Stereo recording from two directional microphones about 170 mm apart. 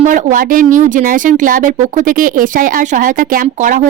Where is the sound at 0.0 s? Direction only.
50° right (ahead or behind).